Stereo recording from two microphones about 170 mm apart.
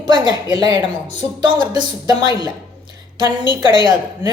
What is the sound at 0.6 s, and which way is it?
Speech, 25° right (ahead or behind).